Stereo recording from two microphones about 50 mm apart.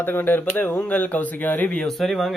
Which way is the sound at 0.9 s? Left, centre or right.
Left.